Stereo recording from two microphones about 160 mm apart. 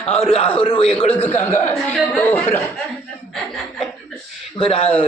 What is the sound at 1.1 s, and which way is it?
A man's voice, 10° left (ahead or behind).